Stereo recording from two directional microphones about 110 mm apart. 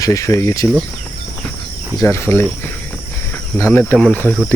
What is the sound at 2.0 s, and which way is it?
Speech, 25° left (ahead or behind).